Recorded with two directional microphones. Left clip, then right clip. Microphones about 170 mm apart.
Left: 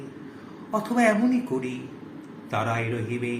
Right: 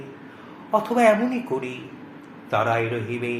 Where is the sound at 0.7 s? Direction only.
20° right (ahead or behind).